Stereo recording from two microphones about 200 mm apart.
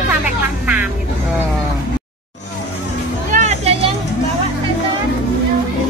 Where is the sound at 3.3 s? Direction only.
35° right (ahead or behind).